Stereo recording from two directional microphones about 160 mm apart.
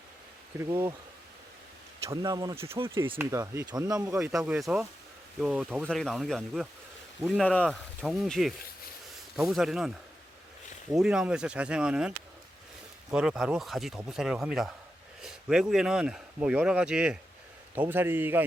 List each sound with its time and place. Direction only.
0.6 s a man's voice: 15° right (ahead or behind)
2.0 s a man's voice: 20° right (ahead or behind)
4.4 s a man's voice: 5° right (ahead or behind)
10.9 s a man's voice: 5° right (ahead or behind)